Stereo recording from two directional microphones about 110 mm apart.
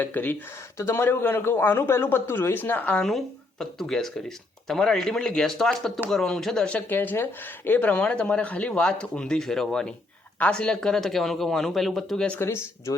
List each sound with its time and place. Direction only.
0.0 s a man's voice: 15° left (ahead or behind)
12.4 s a man's voice: 20° left (ahead or behind)